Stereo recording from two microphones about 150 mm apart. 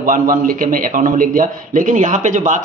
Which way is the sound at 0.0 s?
70° right (ahead or behind).